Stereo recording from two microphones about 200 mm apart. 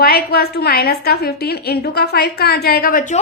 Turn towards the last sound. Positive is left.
turn(degrees=40)  # may be behind; listen again after turning